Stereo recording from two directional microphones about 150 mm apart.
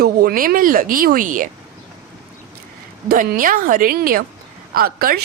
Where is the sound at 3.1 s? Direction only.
70° right (ahead or behind).